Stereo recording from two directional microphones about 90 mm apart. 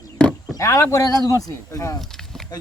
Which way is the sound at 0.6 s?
35° left (ahead or behind).